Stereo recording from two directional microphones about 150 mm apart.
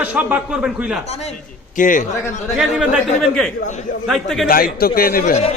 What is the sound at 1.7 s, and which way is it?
Speech, 60° left (ahead or behind).